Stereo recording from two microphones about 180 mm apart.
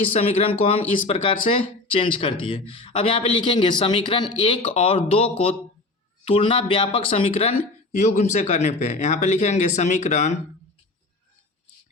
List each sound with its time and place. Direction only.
0.1 s speech: 35° left (ahead or behind)